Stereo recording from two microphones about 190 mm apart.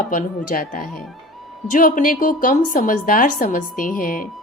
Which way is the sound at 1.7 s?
45° left (ahead or behind).